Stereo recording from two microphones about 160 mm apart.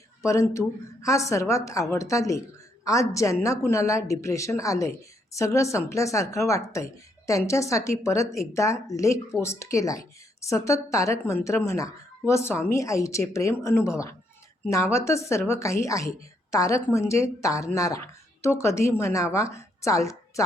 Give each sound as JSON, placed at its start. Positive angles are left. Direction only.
{"t": 0.2, "sound": "a woman's voice", "side_deg": 20}